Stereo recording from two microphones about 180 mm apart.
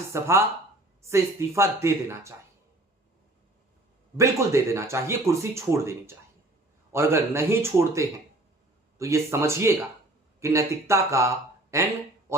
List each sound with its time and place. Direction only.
0.1 s speech: 15° right (ahead or behind)
4.2 s speech: 15° right (ahead or behind)
12.3 s a sound: 15° right (ahead or behind)